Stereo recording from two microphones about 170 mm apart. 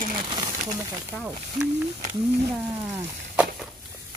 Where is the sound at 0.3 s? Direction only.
25° right (ahead or behind).